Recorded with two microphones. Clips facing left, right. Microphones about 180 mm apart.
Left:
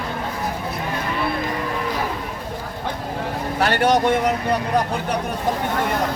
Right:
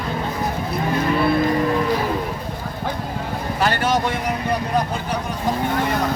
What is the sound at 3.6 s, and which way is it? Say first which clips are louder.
Speech: left 2 dB; 65° left (ahead or behind).